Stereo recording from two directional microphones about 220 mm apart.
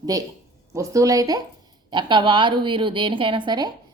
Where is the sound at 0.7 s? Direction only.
15° right (ahead or behind).